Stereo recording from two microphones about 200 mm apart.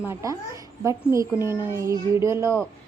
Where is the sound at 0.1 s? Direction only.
15° right (ahead or behind).